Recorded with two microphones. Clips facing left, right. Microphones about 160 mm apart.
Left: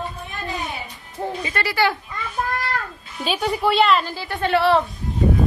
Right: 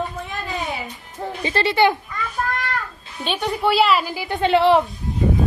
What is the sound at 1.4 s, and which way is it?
Speech, 30° right (ahead or behind).